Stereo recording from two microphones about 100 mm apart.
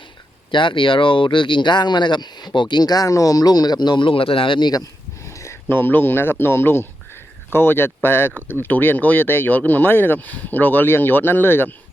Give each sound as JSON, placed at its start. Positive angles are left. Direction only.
{"t": 0.5, "sound": "speech", "side_deg": 55}
{"t": 4.7, "sound": "speech", "side_deg": 35}